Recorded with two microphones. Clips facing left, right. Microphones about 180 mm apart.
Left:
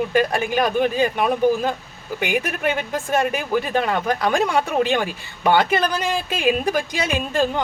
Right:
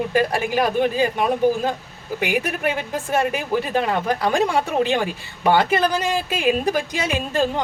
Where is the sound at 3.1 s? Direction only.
30° right (ahead or behind).